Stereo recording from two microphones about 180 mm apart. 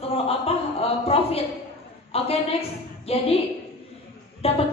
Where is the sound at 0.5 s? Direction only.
35° left (ahead or behind).